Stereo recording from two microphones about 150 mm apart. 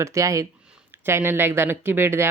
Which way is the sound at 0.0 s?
20° right (ahead or behind).